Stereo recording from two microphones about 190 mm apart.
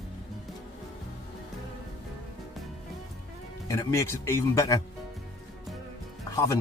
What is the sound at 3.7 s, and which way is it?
Speech, 15° left (ahead or behind).